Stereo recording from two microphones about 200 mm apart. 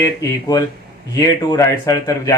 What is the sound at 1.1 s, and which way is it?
Speech, 15° left (ahead or behind).